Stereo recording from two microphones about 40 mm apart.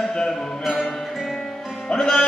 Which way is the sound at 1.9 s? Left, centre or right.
Centre.